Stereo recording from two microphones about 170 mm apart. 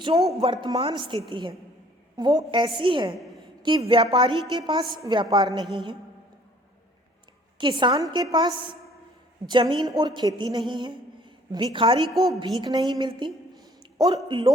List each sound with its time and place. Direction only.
0.0 s a woman's voice: 35° right (ahead or behind)
7.6 s a woman's voice: 25° right (ahead or behind)